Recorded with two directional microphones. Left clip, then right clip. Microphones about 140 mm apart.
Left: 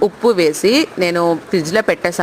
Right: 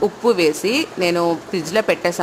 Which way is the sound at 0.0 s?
35° left (ahead or behind).